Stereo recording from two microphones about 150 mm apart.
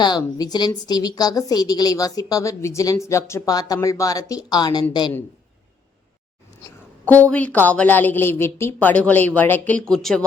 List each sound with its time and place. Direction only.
0.0 s a woman's voice: 25° left (ahead or behind)
7.0 s a woman's voice: 10° left (ahead or behind)